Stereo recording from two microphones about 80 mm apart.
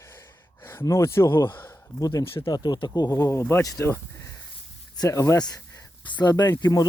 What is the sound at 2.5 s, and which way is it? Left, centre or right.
Speech, left.